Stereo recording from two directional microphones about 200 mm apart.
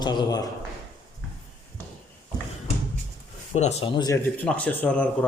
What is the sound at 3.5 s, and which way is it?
Speech, 35° left (ahead or behind).